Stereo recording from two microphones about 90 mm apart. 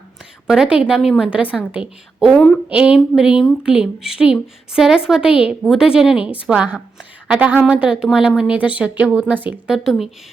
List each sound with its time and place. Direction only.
0.4 s a woman's voice: 5° right (ahead or behind)
2.6 s a woman's voice: 10° right (ahead or behind)
9.6 s speech: 5° right (ahead or behind)